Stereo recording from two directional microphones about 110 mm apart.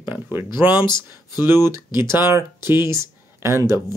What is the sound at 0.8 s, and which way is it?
Speech, 40° left (ahead or behind).